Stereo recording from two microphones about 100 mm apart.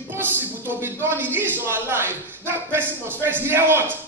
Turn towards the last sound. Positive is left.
turn(degrees=-20)  # may be behind; listen again after turning